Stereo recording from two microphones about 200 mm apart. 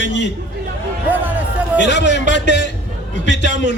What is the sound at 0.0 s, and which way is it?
Speech, 60° left (ahead or behind).